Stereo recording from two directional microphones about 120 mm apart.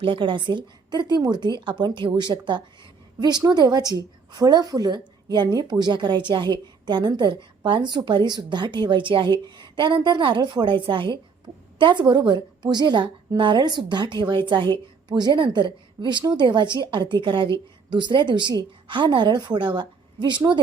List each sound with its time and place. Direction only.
0.0 s a woman's voice: 45° right (ahead or behind)